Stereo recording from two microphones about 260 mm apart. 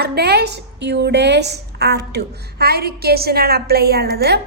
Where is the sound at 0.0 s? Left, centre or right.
Right.